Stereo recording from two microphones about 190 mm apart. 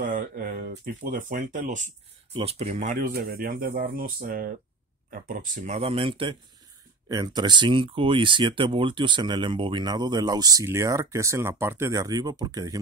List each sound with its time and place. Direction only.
0.0 s speech: 45° right (ahead or behind)
3.1 s speech: 55° right (ahead or behind); by 12.7 s 20° right (ahead or behind)